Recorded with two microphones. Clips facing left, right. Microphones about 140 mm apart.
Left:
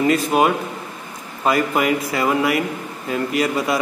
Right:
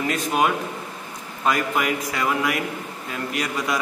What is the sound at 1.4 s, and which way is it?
A man's voice, 5° left (ahead or behind).